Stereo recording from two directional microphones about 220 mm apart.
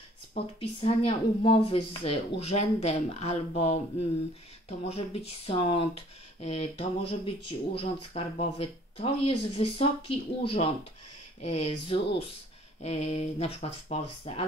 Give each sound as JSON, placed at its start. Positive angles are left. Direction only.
{"t": 0.3, "sound": "speech", "side_deg": 25}